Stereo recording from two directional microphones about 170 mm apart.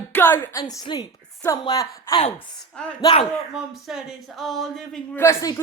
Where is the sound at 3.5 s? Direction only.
Centre (ahead or behind).